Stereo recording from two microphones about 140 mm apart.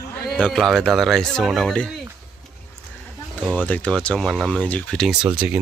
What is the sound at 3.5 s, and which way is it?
Speech, 10° left (ahead or behind).